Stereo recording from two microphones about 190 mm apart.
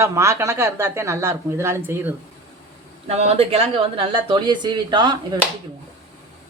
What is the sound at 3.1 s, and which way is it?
Speech, 35° right (ahead or behind).